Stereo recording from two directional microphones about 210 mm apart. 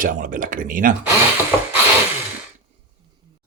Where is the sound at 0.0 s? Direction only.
40° right (ahead or behind).